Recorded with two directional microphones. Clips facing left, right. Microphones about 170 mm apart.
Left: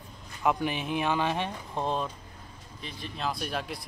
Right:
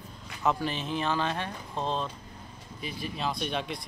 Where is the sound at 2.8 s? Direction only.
5° right (ahead or behind).